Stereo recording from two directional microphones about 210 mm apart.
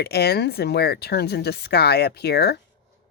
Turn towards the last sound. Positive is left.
turn(degrees=50)  # may be behind; listen again after turning